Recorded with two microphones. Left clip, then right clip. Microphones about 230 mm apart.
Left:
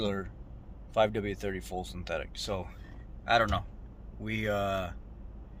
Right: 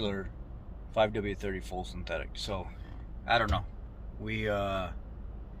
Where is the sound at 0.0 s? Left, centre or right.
Left.